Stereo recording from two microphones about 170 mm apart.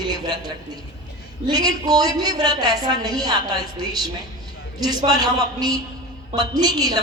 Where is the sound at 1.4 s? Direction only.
25° right (ahead or behind).